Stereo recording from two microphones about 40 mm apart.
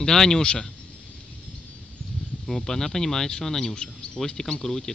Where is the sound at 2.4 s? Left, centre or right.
Centre.